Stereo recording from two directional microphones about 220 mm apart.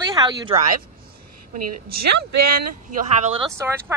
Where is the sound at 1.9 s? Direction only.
45° right (ahead or behind).